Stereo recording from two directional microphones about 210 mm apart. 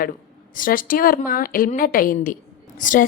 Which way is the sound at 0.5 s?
40° left (ahead or behind).